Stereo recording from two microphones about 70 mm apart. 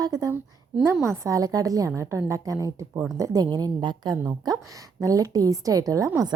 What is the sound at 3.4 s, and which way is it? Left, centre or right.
Speech, right.